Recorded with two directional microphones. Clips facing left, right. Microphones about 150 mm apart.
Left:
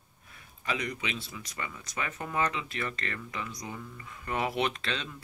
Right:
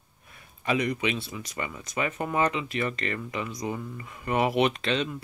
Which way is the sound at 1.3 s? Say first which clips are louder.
Right 5 dB; 20° right (ahead or behind).